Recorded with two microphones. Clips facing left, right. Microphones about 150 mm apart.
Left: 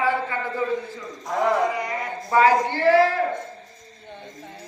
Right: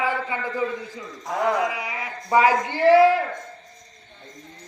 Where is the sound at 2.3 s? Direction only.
15° right (ahead or behind).